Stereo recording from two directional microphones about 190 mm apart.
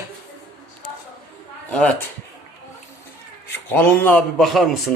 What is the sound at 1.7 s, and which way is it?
Speech, 5° left (ahead or behind).